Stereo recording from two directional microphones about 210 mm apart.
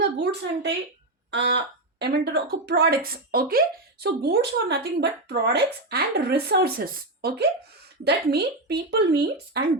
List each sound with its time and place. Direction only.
0.0 s a woman's voice: 55° right (ahead or behind)